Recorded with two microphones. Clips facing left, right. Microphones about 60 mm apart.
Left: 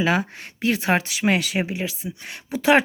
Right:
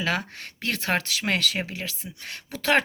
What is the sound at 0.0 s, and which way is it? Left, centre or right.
Speech, centre.